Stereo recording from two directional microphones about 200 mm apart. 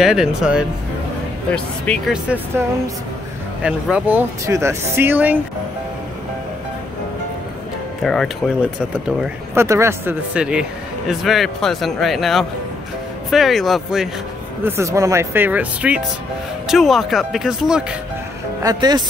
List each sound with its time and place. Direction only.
0.0 s speech: centre (ahead or behind)
3.6 s speech: 5° right (ahead or behind)
8.0 s speech: centre (ahead or behind)
8.9 s speech: 10° right (ahead or behind)
14.6 s speech: 15° right (ahead or behind)
18.6 s speech: 20° right (ahead or behind)